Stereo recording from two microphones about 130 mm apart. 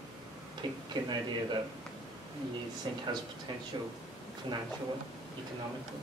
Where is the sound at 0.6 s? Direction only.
35° right (ahead or behind).